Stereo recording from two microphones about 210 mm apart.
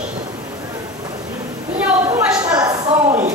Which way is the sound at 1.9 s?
10° right (ahead or behind).